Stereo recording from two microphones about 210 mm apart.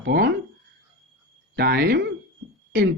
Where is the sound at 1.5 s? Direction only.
45° right (ahead or behind).